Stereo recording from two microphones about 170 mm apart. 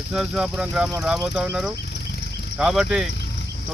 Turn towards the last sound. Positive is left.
turn(degrees=-5)  # may be behind; listen again after turning